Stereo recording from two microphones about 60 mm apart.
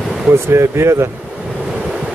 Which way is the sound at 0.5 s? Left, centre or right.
Right.